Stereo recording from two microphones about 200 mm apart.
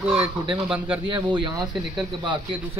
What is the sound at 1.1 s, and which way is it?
Speech, 25° right (ahead or behind).